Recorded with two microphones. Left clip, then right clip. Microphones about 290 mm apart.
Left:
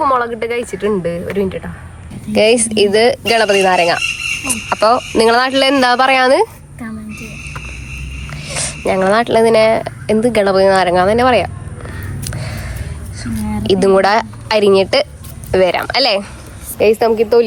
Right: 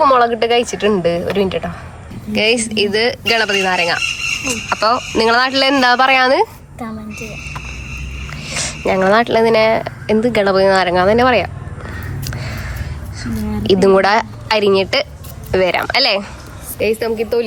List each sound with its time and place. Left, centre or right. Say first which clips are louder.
0.0 s speech: right 3 dB; centre
8.3 s speech: even; centre
12.2 s a sound: left 1 dB; centre
13.1 s a woman's voice: left 1 dB; centre
16.7 s a woman's voice: left 6 dB; centre